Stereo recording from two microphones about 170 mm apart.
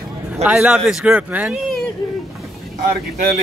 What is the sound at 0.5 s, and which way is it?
Speech, 5° right (ahead or behind).